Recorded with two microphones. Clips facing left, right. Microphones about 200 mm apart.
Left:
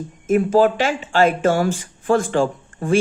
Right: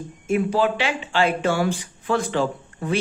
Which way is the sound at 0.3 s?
45° left (ahead or behind).